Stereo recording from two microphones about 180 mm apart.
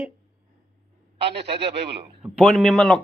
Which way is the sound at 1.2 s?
70° right (ahead or behind).